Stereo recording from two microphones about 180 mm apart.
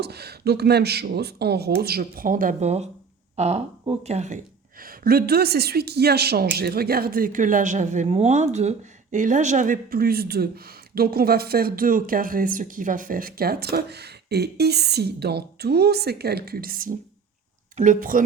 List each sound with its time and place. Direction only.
0.0 s speech: 65° right (ahead or behind); by 4.4 s 40° right (ahead or behind)
4.8 s speech: 55° right (ahead or behind)